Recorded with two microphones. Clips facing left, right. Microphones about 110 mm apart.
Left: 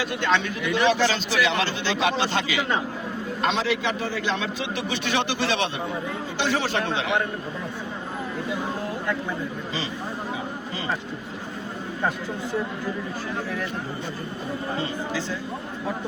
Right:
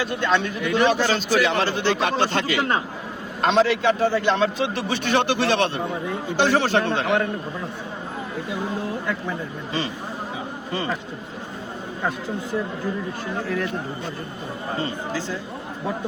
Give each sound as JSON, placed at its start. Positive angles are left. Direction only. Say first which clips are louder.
{"t": 0.0, "sound": "speech", "louder": "right 2 dB", "side_deg": -45}